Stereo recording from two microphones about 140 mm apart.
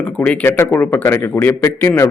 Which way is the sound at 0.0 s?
10° left (ahead or behind).